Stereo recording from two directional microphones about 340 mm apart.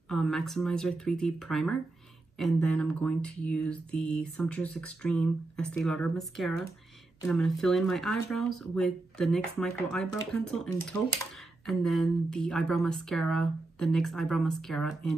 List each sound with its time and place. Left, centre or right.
0.1 s speech: centre